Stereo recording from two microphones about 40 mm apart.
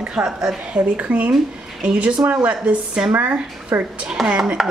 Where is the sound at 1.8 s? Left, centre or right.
Right.